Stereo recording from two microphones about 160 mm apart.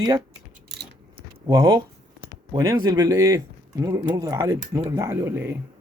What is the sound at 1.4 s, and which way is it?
Speech, 20° right (ahead or behind).